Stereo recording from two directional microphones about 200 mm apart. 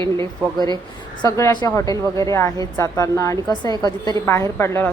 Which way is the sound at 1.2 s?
15° left (ahead or behind).